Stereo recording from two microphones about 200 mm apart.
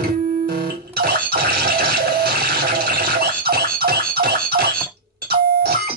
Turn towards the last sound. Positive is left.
turn(degrees=-50)  # may be behind; listen again after turning